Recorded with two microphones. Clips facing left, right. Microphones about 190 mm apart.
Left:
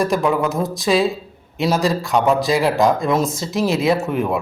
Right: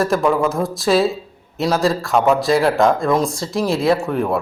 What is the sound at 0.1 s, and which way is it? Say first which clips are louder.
Speech: right 1 dB; centre (ahead or behind).